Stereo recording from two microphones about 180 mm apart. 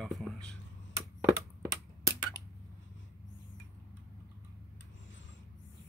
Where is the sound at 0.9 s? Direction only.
20° right (ahead or behind).